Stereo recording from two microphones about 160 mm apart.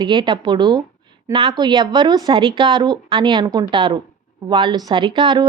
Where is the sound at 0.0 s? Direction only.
30° right (ahead or behind).